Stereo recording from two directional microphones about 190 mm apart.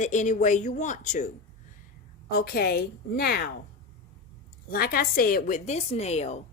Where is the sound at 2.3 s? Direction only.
50° left (ahead or behind).